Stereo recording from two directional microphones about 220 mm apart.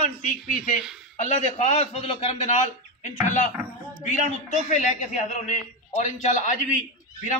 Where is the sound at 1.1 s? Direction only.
30° left (ahead or behind).